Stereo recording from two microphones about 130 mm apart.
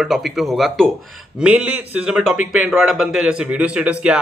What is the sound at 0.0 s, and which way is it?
A man's voice, centre (ahead or behind).